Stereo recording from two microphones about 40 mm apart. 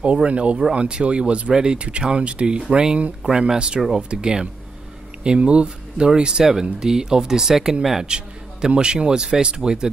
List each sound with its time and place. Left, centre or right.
0.0 s speech: right
3.3 s speech: centre
3.5 s speech: right